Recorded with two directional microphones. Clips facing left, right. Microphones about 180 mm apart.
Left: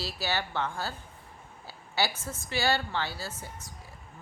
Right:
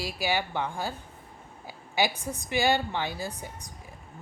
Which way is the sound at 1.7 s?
15° right (ahead or behind).